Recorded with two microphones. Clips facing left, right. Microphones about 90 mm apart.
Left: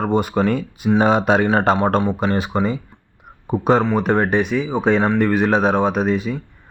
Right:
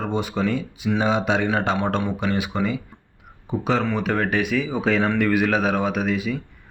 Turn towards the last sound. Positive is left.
turn(degrees=35)  # may be behind; listen again after turning